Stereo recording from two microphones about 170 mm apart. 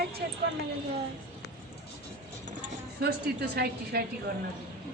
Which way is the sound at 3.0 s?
70° right (ahead or behind).